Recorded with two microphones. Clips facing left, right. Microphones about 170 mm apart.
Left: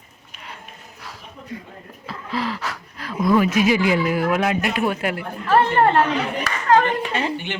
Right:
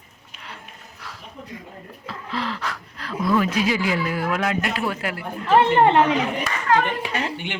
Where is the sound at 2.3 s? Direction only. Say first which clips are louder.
Left 2 dB; 10° left (ahead or behind).